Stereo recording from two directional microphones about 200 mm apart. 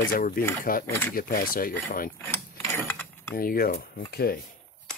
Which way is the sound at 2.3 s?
10° left (ahead or behind).